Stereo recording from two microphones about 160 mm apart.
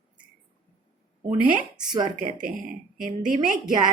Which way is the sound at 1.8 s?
25° right (ahead or behind).